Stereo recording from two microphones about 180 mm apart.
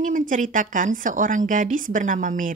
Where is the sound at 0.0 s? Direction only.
45° right (ahead or behind).